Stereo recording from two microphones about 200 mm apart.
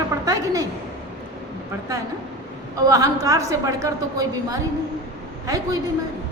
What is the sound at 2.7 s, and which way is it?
A woman's voice, 15° right (ahead or behind).